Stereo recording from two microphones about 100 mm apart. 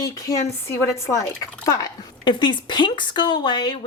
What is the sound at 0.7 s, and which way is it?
Speech, 25° left (ahead or behind).